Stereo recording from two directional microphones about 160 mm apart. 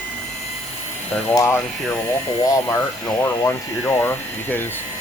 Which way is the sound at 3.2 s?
15° left (ahead or behind).